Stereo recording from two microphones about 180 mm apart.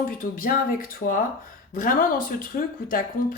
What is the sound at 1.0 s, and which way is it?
Speech, 60° left (ahead or behind).